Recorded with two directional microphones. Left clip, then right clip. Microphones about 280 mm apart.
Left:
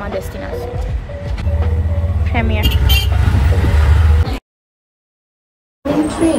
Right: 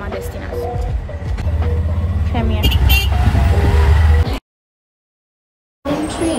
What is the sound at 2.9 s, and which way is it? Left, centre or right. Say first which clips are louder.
Music: even; centre.